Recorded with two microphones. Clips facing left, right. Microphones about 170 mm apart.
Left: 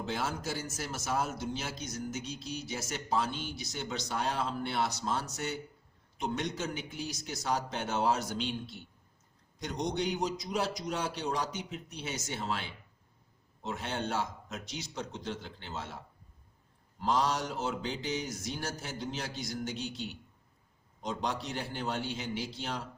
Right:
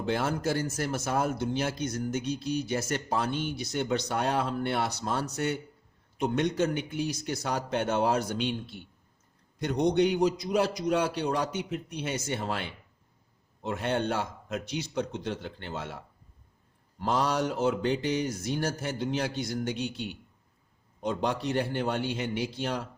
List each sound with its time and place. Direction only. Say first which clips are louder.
0.0 s speech: right 7 dB; 60° right (ahead or behind)
17.0 s speech: right 3 dB; 60° right (ahead or behind)